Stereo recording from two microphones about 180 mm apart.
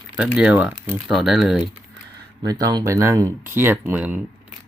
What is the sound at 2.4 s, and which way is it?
Speech, 20° right (ahead or behind).